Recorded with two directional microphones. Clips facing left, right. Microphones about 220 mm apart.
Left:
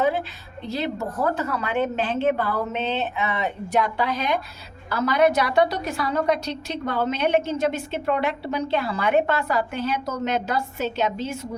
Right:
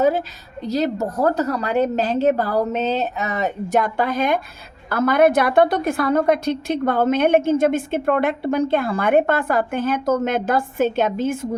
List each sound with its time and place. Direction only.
0.6 s a woman's voice: 40° right (ahead or behind)